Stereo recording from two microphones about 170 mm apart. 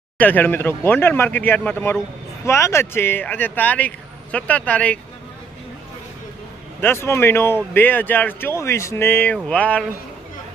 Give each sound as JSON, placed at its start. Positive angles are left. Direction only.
{"t": 0.2, "sound": "speech", "side_deg": 10}
{"t": 6.8, "sound": "speech", "side_deg": 15}